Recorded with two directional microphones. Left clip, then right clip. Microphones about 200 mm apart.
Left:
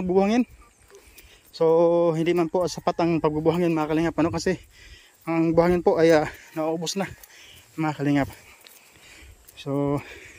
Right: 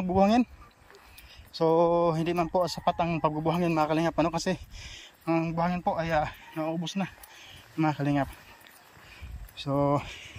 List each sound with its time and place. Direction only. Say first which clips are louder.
0.0 s speech: left 2 dB; 20° left (ahead or behind)
1.5 s speech: left 4 dB; 15° left (ahead or behind)
4.7 s speech: right 4 dB; 5° left (ahead or behind)
5.2 s speech: left 7 dB; 25° left (ahead or behind)
7.3 s cricket: right 1 dB; 15° left (ahead or behind)
9.6 s speech: even; 10° left (ahead or behind)